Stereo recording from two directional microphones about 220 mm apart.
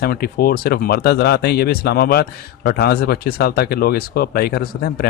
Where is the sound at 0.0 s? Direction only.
45° left (ahead or behind).